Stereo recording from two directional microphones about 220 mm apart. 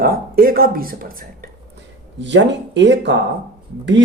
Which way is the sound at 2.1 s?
55° right (ahead or behind).